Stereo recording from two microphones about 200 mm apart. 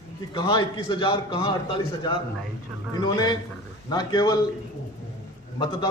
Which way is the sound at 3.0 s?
20° left (ahead or behind).